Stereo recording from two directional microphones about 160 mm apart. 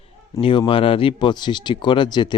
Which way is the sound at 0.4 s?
35° left (ahead or behind).